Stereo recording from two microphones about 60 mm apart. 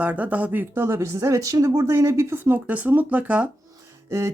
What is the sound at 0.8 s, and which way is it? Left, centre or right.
Speech, right.